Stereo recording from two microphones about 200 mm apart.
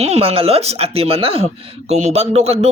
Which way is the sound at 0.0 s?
30° right (ahead or behind).